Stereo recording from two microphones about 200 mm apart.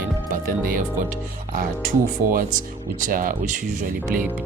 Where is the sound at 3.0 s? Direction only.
45° right (ahead or behind).